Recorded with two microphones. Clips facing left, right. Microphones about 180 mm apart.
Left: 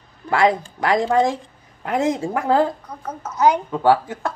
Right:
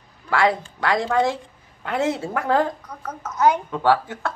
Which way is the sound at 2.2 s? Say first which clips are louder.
Left 3 dB; 10° left (ahead or behind).